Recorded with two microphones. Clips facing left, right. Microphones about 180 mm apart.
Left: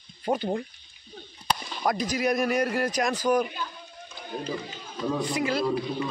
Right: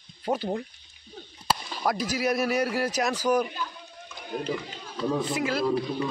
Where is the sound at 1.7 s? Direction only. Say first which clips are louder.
Left 3 dB; 5° right (ahead or behind).